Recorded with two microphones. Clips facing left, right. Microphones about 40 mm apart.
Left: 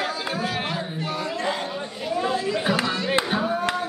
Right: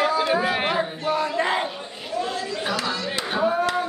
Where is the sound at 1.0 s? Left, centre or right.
Centre.